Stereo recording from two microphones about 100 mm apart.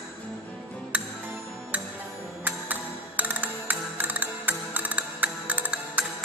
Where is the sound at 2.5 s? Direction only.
15° right (ahead or behind).